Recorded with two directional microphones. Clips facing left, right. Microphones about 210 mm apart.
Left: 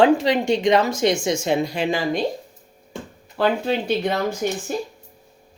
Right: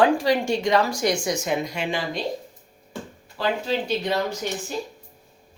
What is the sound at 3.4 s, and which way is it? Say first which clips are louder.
Speech: left 4 dB; 55° left (ahead or behind).